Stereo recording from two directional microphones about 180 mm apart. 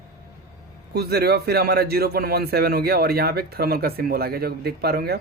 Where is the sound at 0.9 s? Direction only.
65° right (ahead or behind).